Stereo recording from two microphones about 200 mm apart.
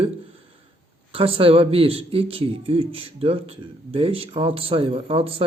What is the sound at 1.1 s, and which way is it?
Speech, 30° right (ahead or behind).